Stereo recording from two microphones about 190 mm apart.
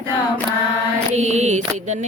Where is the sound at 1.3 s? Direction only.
35° right (ahead or behind).